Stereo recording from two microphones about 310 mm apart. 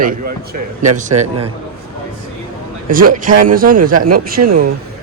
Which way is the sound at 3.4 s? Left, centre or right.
Right.